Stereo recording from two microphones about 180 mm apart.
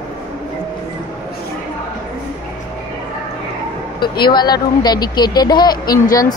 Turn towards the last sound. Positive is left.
turn(degrees=20)  # may be behind; listen again after turning